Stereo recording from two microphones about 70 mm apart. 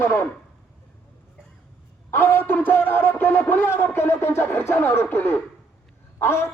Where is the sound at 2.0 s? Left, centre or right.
Left.